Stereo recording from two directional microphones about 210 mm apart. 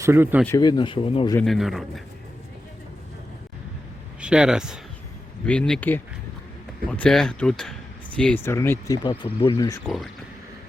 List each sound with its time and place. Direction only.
0.0 s speech: 10° right (ahead or behind)
0.4 s speech: 15° left (ahead or behind)
1.4 s a man's voice: centre (ahead or behind)
4.2 s a man's voice: 5° right (ahead or behind); by 9.8 s 15° left (ahead or behind)
9.8 s a man's voice: centre (ahead or behind)